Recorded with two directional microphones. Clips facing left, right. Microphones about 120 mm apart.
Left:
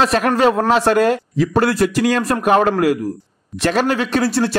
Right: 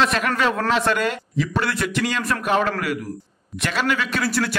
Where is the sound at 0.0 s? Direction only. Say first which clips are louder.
Left 6 dB; 40° left (ahead or behind).